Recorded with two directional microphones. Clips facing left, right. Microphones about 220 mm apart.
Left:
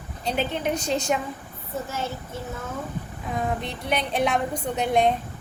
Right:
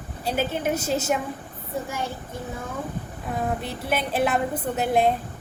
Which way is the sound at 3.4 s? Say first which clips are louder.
Even; 5° right (ahead or behind).